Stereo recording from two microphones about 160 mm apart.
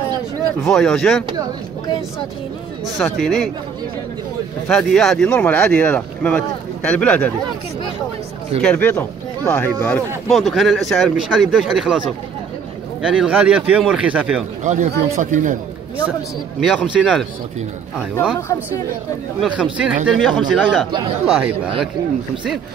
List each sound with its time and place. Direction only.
0.7 s speech: 5° left (ahead or behind)
3.0 s speech: centre (ahead or behind)
4.6 s speech: 5° left (ahead or behind)
8.5 s speech: 5° left (ahead or behind)
10.2 s speech: centre (ahead or behind)
14.6 s speech: 50° right (ahead or behind)
16.5 s speech: 5° right (ahead or behind)
18.1 s speech: 15° left (ahead or behind)
19.4 s speech: 5° right (ahead or behind)